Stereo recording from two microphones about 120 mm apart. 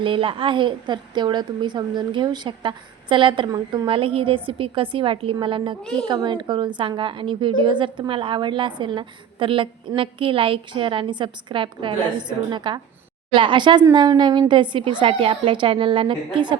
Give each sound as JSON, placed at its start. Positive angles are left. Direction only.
{"t": 0.0, "sound": "a woman's voice", "side_deg": -45}
{"t": 3.5, "sound": "a woman's voice", "side_deg": -35}
{"t": 3.8, "sound": "a woman's voice", "side_deg": -50}